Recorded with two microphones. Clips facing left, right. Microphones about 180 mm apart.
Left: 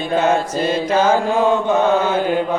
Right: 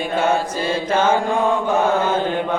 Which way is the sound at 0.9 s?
10° left (ahead or behind).